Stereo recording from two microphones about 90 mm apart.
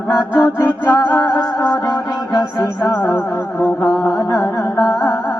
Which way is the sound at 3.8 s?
40° left (ahead or behind).